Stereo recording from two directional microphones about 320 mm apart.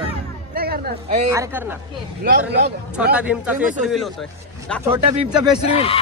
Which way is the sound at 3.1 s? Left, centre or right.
Centre.